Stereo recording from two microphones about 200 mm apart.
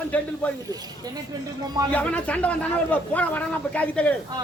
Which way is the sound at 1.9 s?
5° left (ahead or behind).